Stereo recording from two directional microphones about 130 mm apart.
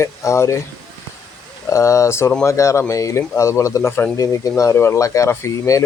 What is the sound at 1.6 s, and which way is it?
Speech, 25° left (ahead or behind).